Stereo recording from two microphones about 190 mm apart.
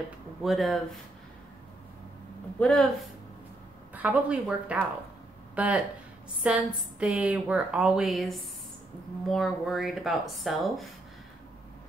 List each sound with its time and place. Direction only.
0.4 s a woman's voice: centre (ahead or behind)
2.6 s a woman's voice: centre (ahead or behind)